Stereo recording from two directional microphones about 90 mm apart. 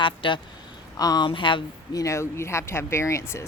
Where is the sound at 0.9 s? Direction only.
45° left (ahead or behind).